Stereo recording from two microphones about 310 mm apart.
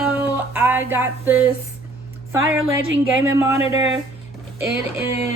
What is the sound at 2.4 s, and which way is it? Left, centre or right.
Speech, right.